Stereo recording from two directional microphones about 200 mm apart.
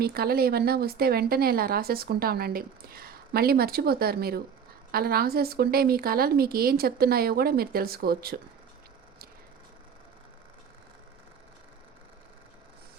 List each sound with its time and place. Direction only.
0.0 s a woman's voice: 50° right (ahead or behind)